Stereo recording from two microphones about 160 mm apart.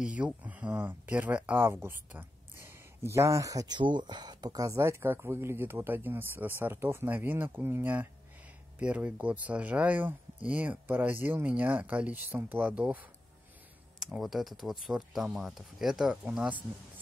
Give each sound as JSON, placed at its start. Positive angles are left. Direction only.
{"t": 0.0, "sound": "speech", "side_deg": -10}